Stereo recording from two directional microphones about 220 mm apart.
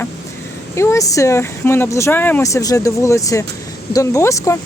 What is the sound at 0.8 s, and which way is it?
Speech, 15° left (ahead or behind).